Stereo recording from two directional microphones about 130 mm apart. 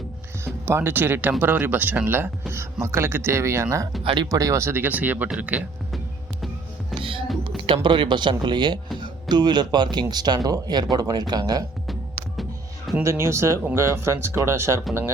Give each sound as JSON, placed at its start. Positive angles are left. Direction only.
{"t": 0.4, "sound": "speech", "side_deg": -20}
{"t": 4.0, "sound": "speech", "side_deg": -40}
{"t": 4.3, "sound": "speech", "side_deg": -25}
{"t": 6.9, "sound": "music", "side_deg": -45}
{"t": 7.4, "sound": "speech", "side_deg": -40}
{"t": 13.0, "sound": "speech", "side_deg": -20}